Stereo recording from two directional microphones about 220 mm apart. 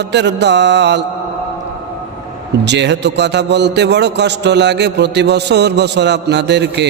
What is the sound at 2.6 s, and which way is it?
A man's voice, 50° right (ahead or behind).